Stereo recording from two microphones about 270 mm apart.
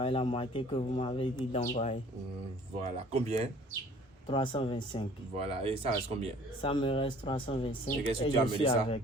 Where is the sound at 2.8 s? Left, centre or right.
Right.